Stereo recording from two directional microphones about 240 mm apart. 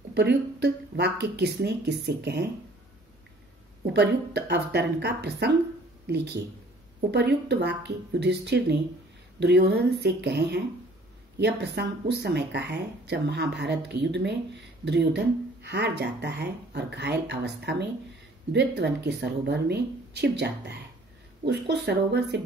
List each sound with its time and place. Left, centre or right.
0.1 s speech: right
3.8 s speech: right